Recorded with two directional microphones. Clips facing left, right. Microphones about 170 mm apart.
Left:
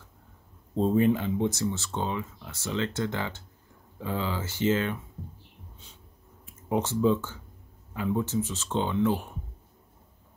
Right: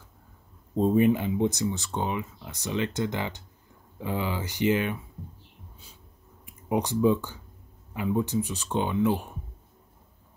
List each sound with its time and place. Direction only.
0.7 s speech: 10° right (ahead or behind)
6.4 s speech: 15° right (ahead or behind)